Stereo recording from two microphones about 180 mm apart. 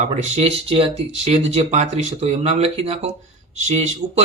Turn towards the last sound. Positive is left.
turn(degrees=-40)  # may be behind; listen again after turning